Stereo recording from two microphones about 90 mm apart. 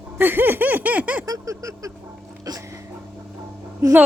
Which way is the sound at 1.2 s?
40° right (ahead or behind).